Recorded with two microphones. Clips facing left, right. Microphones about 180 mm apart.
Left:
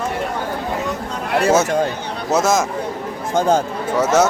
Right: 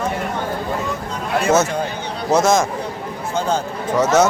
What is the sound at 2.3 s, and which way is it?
Speech, 5° left (ahead or behind).